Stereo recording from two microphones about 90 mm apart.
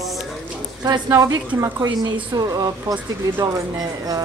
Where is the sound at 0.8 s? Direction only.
45° right (ahead or behind).